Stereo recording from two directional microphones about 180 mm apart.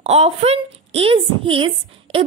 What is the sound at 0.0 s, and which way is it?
A woman's voice, 35° right (ahead or behind).